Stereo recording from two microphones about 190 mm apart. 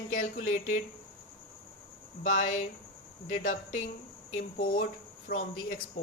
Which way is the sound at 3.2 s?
45° left (ahead or behind).